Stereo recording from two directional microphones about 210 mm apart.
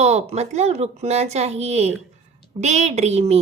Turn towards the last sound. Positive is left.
turn(degrees=-30)  # may be behind; listen again after turning